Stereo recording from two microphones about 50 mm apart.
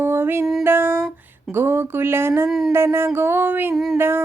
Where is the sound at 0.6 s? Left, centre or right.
Right.